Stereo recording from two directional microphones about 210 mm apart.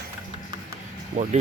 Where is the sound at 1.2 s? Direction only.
35° right (ahead or behind).